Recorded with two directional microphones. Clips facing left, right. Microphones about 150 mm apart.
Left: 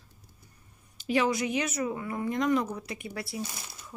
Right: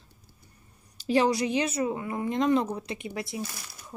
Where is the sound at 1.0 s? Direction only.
35° right (ahead or behind).